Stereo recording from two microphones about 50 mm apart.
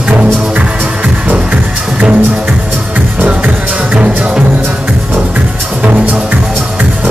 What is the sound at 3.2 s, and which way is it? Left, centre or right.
Music, right.